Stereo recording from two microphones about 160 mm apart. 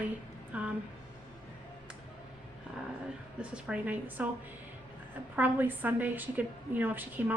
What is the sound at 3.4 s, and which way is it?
Speech, 5° right (ahead or behind).